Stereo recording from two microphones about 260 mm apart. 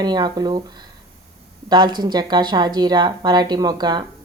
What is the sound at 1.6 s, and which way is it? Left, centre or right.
Speech, centre.